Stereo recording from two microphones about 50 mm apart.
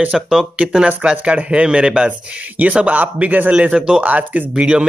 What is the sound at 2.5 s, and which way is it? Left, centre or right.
Speech, right.